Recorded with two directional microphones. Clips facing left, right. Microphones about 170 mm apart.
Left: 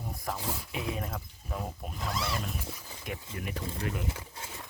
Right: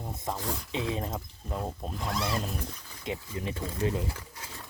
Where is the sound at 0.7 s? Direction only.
25° right (ahead or behind).